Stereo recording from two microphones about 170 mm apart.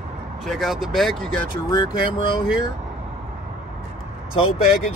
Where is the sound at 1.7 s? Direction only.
25° left (ahead or behind).